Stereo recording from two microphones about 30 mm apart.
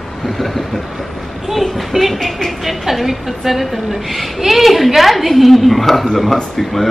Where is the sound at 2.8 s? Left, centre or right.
Centre.